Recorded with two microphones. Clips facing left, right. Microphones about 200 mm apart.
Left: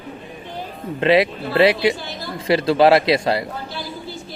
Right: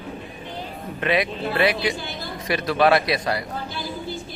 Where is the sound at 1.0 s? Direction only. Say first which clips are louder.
Left 7 dB; 25° left (ahead or behind).